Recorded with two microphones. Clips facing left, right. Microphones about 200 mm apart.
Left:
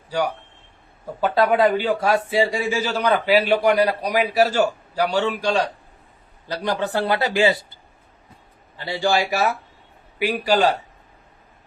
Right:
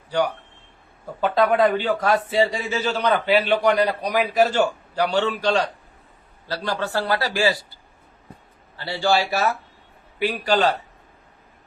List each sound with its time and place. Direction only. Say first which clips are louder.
1.2 s a man's voice: left 1 dB; centre (ahead or behind); by 7.6 s 20° left (ahead or behind)
8.7 s a man's voice: even; 15° left (ahead or behind)